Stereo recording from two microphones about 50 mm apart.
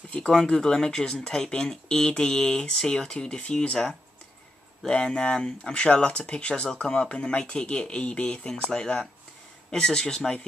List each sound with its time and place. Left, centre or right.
0.3 s speech: centre